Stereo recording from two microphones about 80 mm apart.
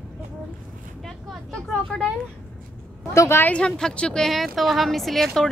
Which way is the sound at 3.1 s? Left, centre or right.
Left.